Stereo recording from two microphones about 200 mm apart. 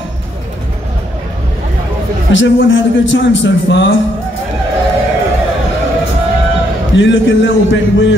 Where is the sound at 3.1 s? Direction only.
65° left (ahead or behind).